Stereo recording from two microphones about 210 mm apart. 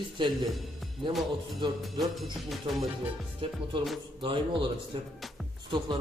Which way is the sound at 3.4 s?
25° right (ahead or behind).